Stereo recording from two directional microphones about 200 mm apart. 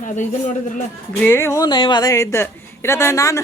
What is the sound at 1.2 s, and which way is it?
Speech, 10° left (ahead or behind).